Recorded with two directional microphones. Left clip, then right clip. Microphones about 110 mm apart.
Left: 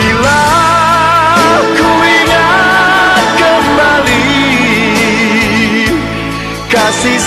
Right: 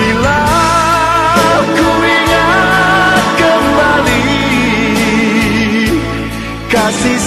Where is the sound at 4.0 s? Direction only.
40° right (ahead or behind).